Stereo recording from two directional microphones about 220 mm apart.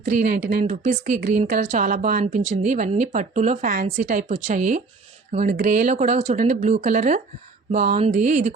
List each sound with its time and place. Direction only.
0.0 s speech: 40° right (ahead or behind)